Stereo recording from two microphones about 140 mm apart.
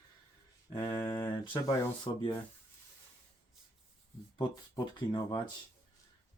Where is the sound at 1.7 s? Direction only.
35° left (ahead or behind).